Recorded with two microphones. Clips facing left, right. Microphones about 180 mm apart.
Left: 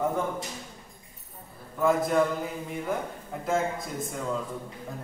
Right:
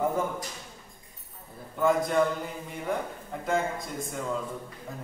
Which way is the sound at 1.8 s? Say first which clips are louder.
Left 1 dB; centre (ahead or behind).